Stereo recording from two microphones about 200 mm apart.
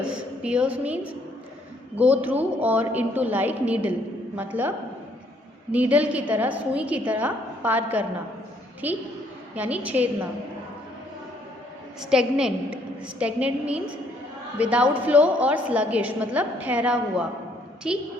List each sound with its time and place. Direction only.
0.0 s a woman's voice: 5° right (ahead or behind)
5.7 s a woman's voice: 5° right (ahead or behind)
11.9 s a woman's voice: 5° right (ahead or behind)